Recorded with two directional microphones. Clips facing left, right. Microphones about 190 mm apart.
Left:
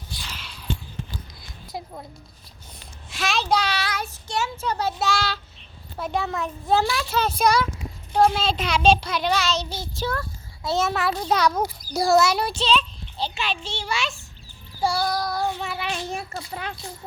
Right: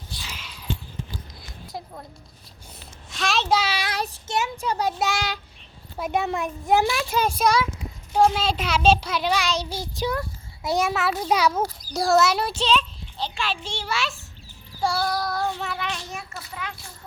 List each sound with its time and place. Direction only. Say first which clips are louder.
0.2 s a sound: even; 10° right (ahead or behind)
1.6 s music: left 2 dB; 5° left (ahead or behind)
3.1 s a sound: even; centre (ahead or behind)
3.9 s child singing: right 2 dB; 35° right (ahead or behind)
4.3 s a child's voice: even; 20° right (ahead or behind)
7.4 s a child's voice: left 1 dB; centre (ahead or behind)
14.9 s child singing: even; 15° left (ahead or behind)
15.2 s music: left 1 dB; centre (ahead or behind)
16.0 s a child's voice: left 5 dB; 30° left (ahead or behind)